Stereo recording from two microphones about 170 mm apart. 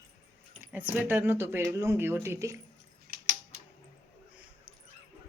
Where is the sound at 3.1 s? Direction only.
55° right (ahead or behind).